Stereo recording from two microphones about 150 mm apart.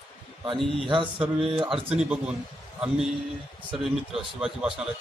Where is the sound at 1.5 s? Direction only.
35° right (ahead or behind).